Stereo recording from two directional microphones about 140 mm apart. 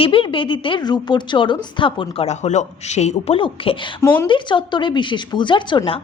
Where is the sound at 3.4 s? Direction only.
35° left (ahead or behind).